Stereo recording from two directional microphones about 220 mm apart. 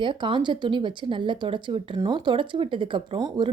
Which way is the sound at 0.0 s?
20° right (ahead or behind).